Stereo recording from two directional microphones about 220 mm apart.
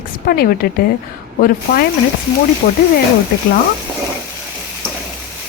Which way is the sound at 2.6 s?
40° left (ahead or behind).